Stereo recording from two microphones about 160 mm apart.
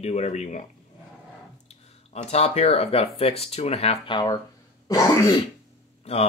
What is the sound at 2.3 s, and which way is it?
Speech, 40° left (ahead or behind).